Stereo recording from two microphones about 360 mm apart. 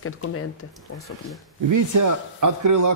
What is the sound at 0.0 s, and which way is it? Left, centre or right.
Speech, left.